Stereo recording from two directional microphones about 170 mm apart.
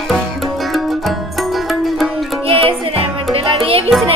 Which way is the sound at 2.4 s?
35° right (ahead or behind).